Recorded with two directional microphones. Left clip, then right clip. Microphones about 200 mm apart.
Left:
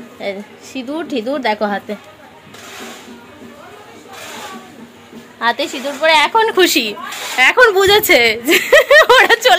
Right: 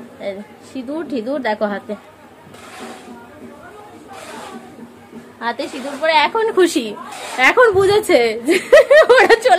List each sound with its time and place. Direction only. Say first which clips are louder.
0.2 s a woman's voice: left 3 dB; 25° left (ahead or behind)
5.4 s a woman's voice: left 6 dB; 30° left (ahead or behind)
6.5 s a woman's voice: left 3 dB; 5° right (ahead or behind)